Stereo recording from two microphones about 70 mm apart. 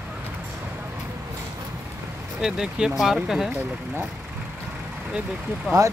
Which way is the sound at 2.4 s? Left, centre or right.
Centre.